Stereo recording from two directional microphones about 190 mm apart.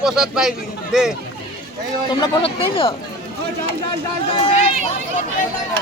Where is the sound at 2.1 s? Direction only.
25° left (ahead or behind).